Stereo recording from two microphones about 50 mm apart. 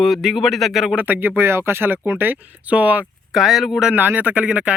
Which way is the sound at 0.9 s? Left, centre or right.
Right.